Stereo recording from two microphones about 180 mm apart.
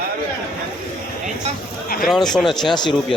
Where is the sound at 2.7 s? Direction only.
25° left (ahead or behind).